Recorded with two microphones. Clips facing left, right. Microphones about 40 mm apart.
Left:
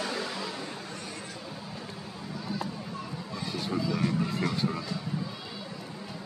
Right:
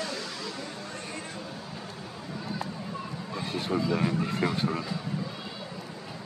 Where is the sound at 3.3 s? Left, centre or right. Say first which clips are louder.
Right 3 dB; centre.